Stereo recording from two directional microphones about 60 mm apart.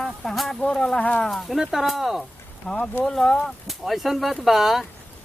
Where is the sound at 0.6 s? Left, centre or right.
Centre.